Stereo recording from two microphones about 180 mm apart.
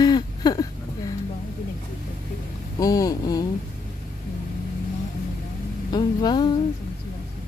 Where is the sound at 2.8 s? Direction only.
20° left (ahead or behind).